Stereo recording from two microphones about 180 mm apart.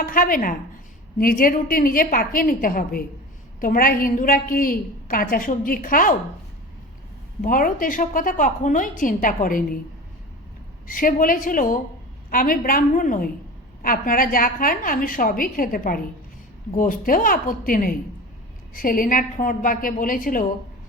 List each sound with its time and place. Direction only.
0.0 s a woman's voice: 50° left (ahead or behind)
7.4 s a woman's voice: 50° left (ahead or behind)
10.8 s a woman's voice: 50° left (ahead or behind)